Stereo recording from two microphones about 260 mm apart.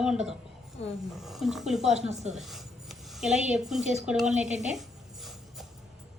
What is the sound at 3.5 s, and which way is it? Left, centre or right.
Speech, centre.